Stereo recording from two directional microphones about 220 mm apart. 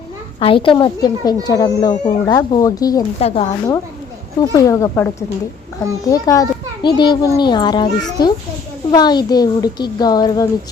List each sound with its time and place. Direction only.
0.3 s a child's voice: 25° left (ahead or behind)
3.2 s a child's voice: 25° left (ahead or behind)
8.9 s a child's voice: 20° left (ahead or behind)